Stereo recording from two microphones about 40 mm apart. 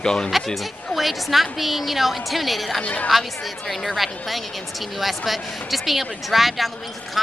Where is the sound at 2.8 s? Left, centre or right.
Left.